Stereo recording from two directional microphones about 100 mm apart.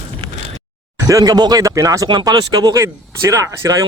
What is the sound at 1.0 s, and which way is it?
Speech, 35° right (ahead or behind).